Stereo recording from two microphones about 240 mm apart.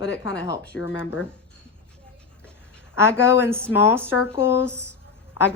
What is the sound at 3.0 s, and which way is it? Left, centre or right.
A woman's voice, centre.